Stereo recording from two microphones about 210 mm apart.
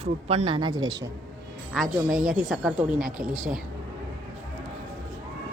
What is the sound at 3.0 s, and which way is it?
Speech, 40° right (ahead or behind).